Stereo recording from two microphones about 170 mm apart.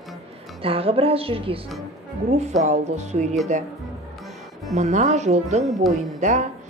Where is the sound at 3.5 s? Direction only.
45° right (ahead or behind).